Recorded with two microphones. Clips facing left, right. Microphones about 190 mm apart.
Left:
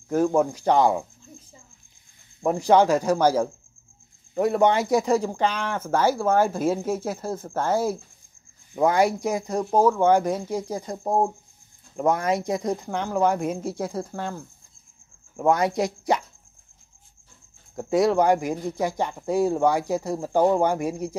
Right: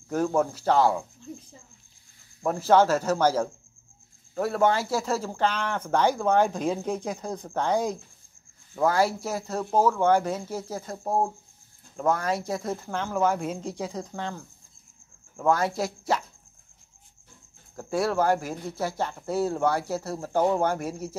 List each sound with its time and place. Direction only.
0.1 s speech: 10° left (ahead or behind)
2.4 s speech: 15° left (ahead or behind)
8.7 s speech: 20° left (ahead or behind)
15.3 s speech: 20° left (ahead or behind)
17.7 s speech: 20° left (ahead or behind)